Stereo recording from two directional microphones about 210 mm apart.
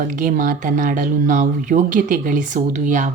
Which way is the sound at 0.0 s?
40° right (ahead or behind).